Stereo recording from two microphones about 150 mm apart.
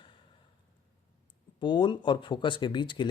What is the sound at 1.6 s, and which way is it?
Speech, 30° left (ahead or behind).